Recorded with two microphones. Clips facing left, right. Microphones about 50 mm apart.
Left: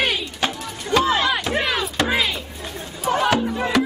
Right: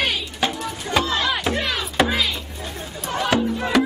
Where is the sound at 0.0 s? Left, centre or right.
Centre.